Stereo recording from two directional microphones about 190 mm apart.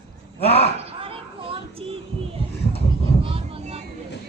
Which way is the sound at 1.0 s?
30° right (ahead or behind).